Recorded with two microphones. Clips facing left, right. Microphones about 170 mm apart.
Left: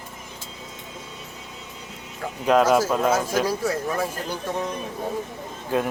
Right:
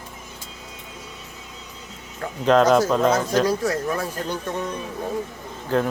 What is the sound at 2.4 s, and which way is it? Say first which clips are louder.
Speech: right 2 dB; 10° left (ahead or behind).